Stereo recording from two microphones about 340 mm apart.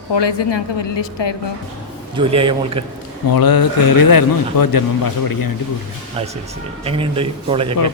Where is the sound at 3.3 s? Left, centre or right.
Left.